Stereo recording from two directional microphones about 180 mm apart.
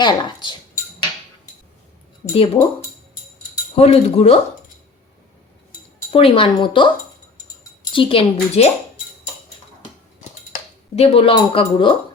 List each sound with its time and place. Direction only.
0.0 s speech: 25° left (ahead or behind)
2.3 s speech: 30° left (ahead or behind)
3.8 s speech: 35° left (ahead or behind)
6.1 s speech: 30° left (ahead or behind)
7.9 s speech: 30° left (ahead or behind)
10.9 s speech: 35° left (ahead or behind)